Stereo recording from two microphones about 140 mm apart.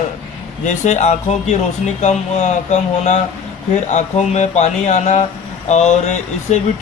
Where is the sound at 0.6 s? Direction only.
60° left (ahead or behind).